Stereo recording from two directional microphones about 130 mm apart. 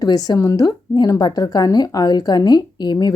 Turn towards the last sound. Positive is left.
turn(degrees=30)  # may be behind; listen again after turning